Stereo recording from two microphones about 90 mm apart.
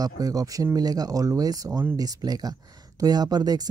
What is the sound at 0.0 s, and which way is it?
Speech, 40° right (ahead or behind).